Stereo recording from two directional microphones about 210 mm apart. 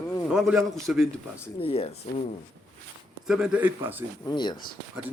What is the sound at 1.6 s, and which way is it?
Speech, 25° left (ahead or behind).